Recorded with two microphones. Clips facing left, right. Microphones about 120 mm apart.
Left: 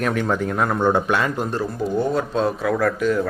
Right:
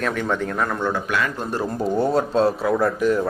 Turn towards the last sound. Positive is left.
turn(degrees=-25)  # may be behind; listen again after turning